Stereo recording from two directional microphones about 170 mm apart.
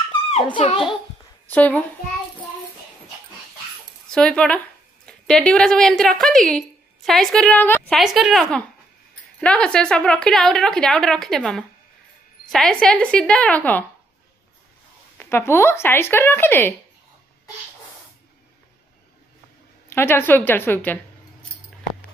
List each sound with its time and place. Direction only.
0.3 s a child's voice: 35° left (ahead or behind)
1.5 s speech: 10° left (ahead or behind)
4.1 s a woman's voice: 5° left (ahead or behind)
8.0 s a woman's voice: centre (ahead or behind)
15.1 s speech: 15° left (ahead or behind)
19.9 s speech: 15° left (ahead or behind)